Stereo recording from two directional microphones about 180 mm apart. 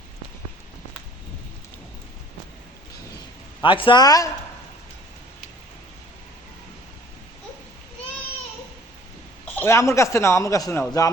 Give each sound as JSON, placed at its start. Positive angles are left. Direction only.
{"t": 3.6, "sound": "a man's voice", "side_deg": 30}
{"t": 9.6, "sound": "speech", "side_deg": 15}